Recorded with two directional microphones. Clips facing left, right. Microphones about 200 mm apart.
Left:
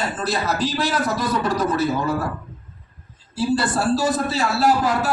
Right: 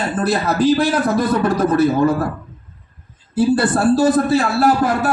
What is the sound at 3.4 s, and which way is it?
A man's voice, 55° right (ahead or behind).